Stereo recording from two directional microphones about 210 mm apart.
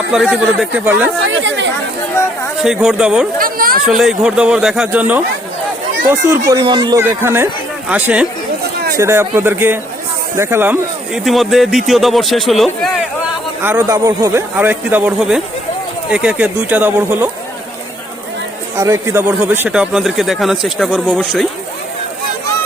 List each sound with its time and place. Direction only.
0.1 s a man's voice: centre (ahead or behind)
1.2 s speech: 60° right (ahead or behind)
2.6 s speech: 5° right (ahead or behind)
3.3 s speech: 45° right (ahead or behind)
3.8 s a man's voice: centre (ahead or behind)
13.6 s a man's voice: 10° right (ahead or behind)
18.8 s speech: 15° right (ahead or behind); by 21.4 s 5° left (ahead or behind)